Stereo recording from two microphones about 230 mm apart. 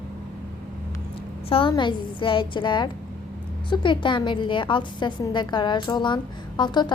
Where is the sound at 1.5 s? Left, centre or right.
Left.